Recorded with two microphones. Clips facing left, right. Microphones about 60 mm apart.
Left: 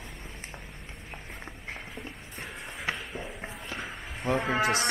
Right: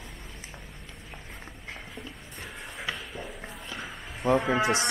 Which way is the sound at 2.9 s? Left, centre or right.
Left.